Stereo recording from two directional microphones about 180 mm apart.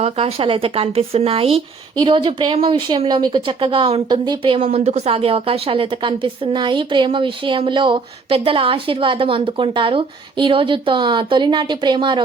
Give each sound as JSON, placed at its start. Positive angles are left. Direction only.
{"t": 0.0, "sound": "speech", "side_deg": -35}